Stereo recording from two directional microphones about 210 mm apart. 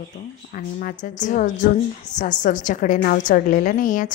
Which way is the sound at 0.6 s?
40° left (ahead or behind).